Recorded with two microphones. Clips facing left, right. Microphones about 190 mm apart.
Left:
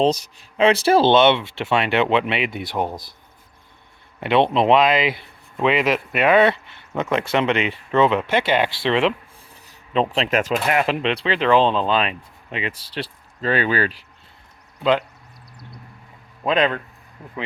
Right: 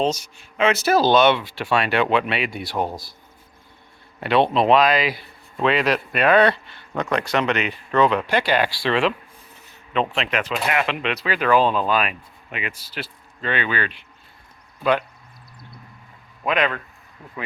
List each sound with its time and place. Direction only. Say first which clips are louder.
0.0 s speech: left 4 dB; 35° left (ahead or behind); by 3.2 s 20° left (ahead or behind)
4.2 s speech: left 1 dB; 20° left (ahead or behind)
9.6 s speech: left 2 dB; 35° left (ahead or behind)
14.8 s speech: left 2 dB; 20° left (ahead or behind)
16.4 s speech: left 3 dB; 30° left (ahead or behind)